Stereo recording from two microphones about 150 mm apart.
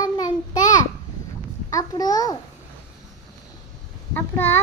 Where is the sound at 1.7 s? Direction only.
25° left (ahead or behind).